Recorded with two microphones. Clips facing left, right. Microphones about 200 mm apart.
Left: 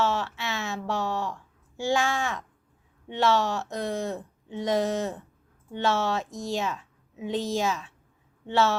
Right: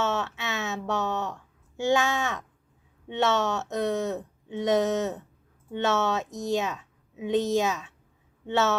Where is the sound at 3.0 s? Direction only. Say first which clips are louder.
Left 1 dB; 20° right (ahead or behind).